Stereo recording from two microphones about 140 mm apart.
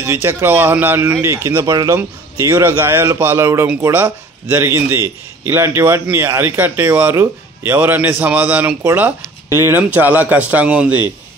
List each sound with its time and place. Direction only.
0.0 s speech: 20° right (ahead or behind)